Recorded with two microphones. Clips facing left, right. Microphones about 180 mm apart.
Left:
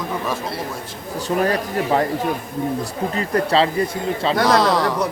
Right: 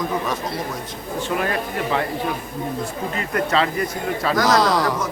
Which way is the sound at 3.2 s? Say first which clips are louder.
Left 3 dB; 30° left (ahead or behind).